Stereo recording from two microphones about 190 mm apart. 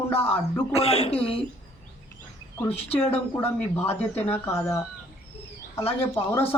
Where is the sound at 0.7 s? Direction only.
30° left (ahead or behind).